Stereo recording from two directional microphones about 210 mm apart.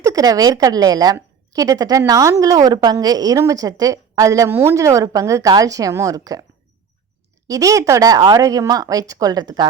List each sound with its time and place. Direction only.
0.0 s a woman's voice: 15° right (ahead or behind)
7.4 s a woman's voice: 15° right (ahead or behind)